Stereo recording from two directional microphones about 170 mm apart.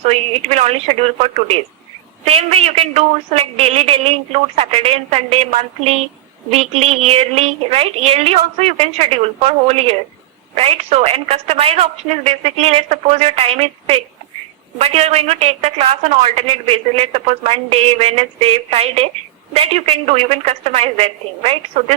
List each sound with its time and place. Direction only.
0.1 s a woman's voice: 40° right (ahead or behind)